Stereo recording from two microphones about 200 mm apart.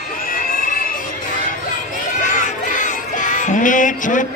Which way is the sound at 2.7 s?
40° left (ahead or behind).